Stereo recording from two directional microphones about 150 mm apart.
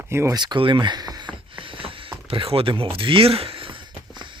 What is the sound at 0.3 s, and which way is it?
Speech, 30° right (ahead or behind).